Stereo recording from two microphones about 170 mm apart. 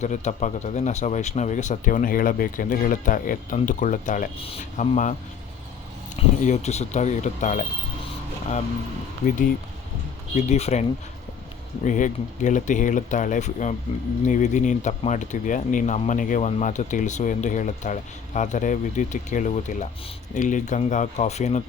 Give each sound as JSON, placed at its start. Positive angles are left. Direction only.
{"t": 0.0, "sound": "speech", "side_deg": 45}
{"t": 4.4, "sound": "speech", "side_deg": 35}
{"t": 6.1, "sound": "speech", "side_deg": 40}
{"t": 10.3, "sound": "speech", "side_deg": 40}
{"t": 11.9, "sound": "speech", "side_deg": 50}